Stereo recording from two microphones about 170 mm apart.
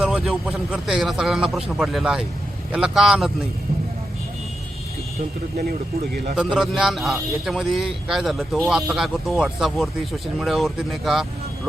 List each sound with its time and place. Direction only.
0.0 s a man's voice: 5° right (ahead or behind)
5.6 s speech: 60° right (ahead or behind)
6.3 s a man's voice: 5° right (ahead or behind)